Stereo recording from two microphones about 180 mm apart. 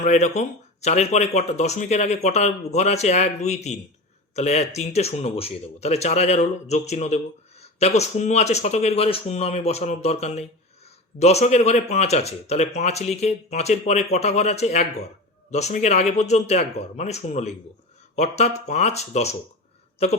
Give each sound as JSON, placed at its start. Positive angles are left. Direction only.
{"t": 0.0, "sound": "speech", "side_deg": 40}